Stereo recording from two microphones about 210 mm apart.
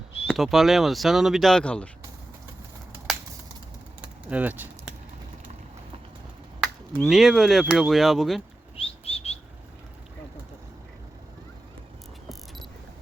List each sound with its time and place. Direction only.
0.3 s speech: centre (ahead or behind)
3.1 s a sound: centre (ahead or behind)
4.0 s typing: 5° right (ahead or behind)
6.6 s speech: centre (ahead or behind)
8.7 s bird flight: 30° left (ahead or behind)